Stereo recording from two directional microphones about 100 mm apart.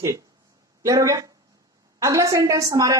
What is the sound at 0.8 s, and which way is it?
Speech, 35° right (ahead or behind).